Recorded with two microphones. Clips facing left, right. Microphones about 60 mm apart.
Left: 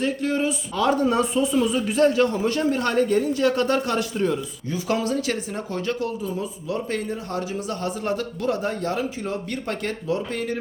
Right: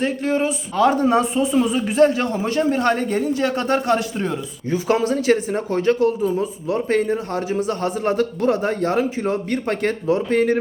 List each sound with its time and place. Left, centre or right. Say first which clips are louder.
0.0 s a man's voice: right 3 dB; right